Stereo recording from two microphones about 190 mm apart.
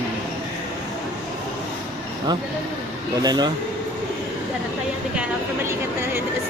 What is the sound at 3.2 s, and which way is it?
Speech, 20° right (ahead or behind).